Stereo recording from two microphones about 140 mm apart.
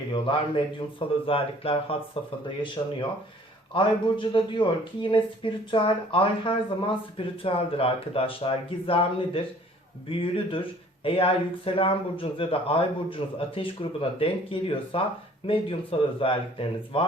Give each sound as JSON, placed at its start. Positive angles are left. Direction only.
{"t": 0.1, "sound": "speech", "side_deg": 40}
{"t": 2.8, "sound": "speech", "side_deg": 30}